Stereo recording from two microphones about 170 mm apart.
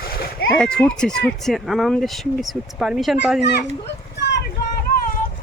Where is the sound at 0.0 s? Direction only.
65° left (ahead or behind).